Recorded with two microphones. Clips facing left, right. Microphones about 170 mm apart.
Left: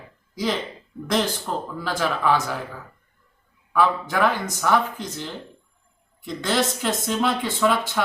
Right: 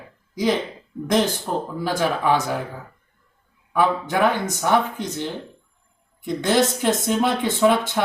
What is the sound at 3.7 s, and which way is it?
Speech, 20° right (ahead or behind).